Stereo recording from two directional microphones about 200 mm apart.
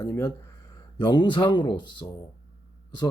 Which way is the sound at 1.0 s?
20° left (ahead or behind).